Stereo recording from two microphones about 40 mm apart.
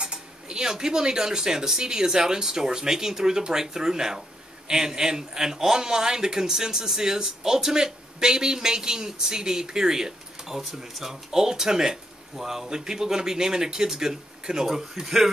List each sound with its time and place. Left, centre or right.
0.0 s a man's voice: centre